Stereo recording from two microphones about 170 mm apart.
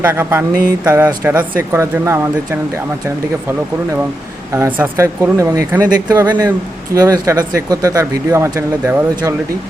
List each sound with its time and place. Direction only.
0.0 s speech: 10° right (ahead or behind)
4.5 s speech: 15° right (ahead or behind)